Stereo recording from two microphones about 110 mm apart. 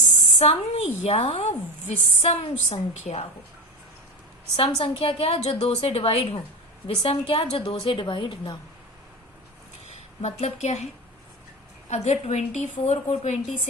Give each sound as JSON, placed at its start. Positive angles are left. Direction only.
{"t": 0.3, "sound": "a woman's voice", "side_deg": 70}
{"t": 2.9, "sound": "a woman's voice", "side_deg": 90}
{"t": 4.8, "sound": "a woman's voice", "side_deg": 60}
{"t": 9.8, "sound": "a woman's voice", "side_deg": 90}
{"t": 11.9, "sound": "a woman's voice", "side_deg": 90}